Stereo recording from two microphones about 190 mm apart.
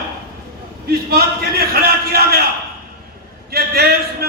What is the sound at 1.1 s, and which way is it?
A man's voice, 55° right (ahead or behind).